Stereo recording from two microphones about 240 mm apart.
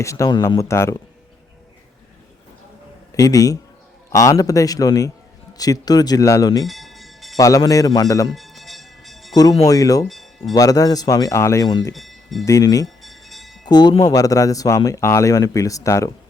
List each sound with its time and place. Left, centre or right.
0.0 s speech: centre
3.1 s a man's voice: centre
6.7 s music: centre
7.3 s speech: centre
8.3 s music: centre
9.3 s speech: centre
10.1 s a sound: centre
10.5 s speech: centre
11.9 s a sound: centre
12.5 s speech: centre
13.0 s a sound: centre
13.7 s speech: centre